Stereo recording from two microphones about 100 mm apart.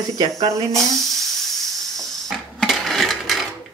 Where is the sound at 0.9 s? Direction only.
Centre (ahead or behind).